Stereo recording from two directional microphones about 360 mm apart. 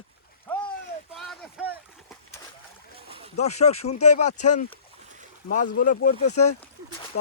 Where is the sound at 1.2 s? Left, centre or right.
Centre.